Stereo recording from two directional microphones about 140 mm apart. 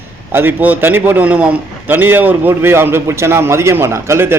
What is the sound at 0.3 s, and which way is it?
Speech, 15° right (ahead or behind).